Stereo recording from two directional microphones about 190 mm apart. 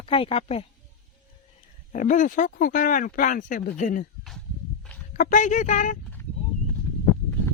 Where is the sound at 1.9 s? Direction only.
40° left (ahead or behind).